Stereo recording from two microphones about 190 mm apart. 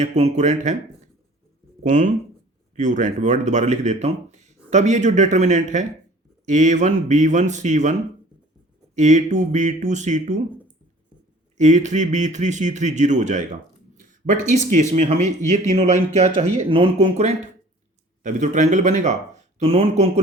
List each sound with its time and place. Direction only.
0.0 s speech: 35° right (ahead or behind)
1.8 s speech: 40° right (ahead or behind)
9.0 s speech: 40° right (ahead or behind)
11.5 s speech: 40° right (ahead or behind)